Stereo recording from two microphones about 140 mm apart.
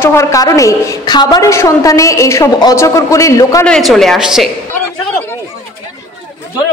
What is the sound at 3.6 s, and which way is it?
Speech, 5° left (ahead or behind).